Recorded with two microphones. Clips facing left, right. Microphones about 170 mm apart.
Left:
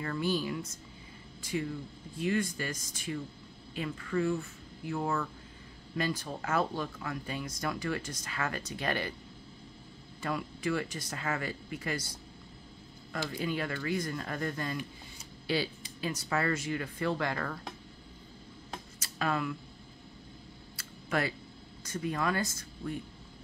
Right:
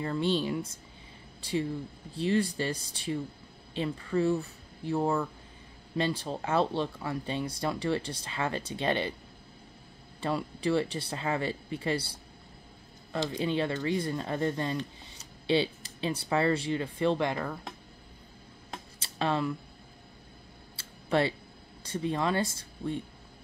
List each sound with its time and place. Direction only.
0.0 s speech: 25° right (ahead or behind)
10.2 s speech: 30° right (ahead or behind)
13.1 s speech: 20° right (ahead or behind)
18.9 s a sound: 30° right (ahead or behind)
20.7 s a sound: 30° right (ahead or behind)
21.8 s speech: 30° right (ahead or behind)